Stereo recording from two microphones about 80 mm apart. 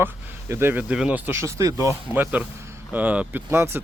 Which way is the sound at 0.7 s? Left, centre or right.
Centre.